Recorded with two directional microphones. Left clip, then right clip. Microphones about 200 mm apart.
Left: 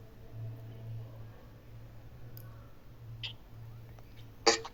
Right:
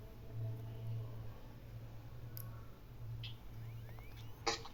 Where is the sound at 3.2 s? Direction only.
50° left (ahead or behind).